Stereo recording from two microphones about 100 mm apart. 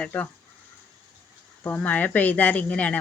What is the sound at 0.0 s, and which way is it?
Speech, 15° left (ahead or behind).